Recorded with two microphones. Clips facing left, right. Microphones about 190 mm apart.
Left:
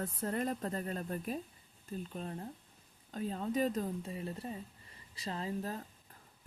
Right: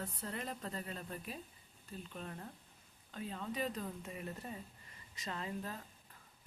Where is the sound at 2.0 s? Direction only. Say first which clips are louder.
Left 5 dB; 35° left (ahead or behind).